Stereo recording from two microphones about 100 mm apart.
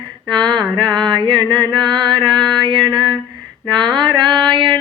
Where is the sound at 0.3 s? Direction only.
50° right (ahead or behind).